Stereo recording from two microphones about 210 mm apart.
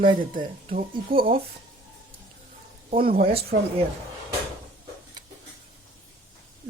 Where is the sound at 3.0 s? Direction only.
45° right (ahead or behind).